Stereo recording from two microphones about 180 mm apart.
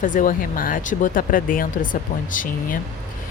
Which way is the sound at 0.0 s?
50° left (ahead or behind).